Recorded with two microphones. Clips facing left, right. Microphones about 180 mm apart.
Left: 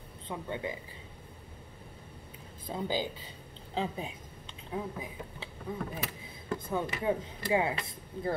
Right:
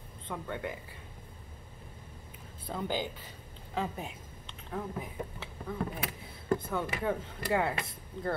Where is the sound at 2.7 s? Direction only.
10° left (ahead or behind).